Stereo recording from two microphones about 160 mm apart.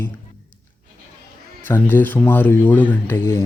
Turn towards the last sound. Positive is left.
turn(degrees=15)  # may be behind; listen again after turning